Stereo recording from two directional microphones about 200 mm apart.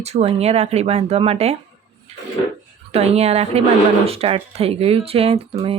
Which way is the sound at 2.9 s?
30° right (ahead or behind).